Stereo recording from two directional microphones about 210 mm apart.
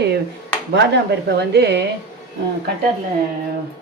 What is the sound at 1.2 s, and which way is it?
Speech, 50° right (ahead or behind).